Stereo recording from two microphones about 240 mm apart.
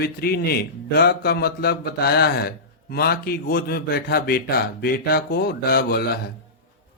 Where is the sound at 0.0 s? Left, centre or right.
Left.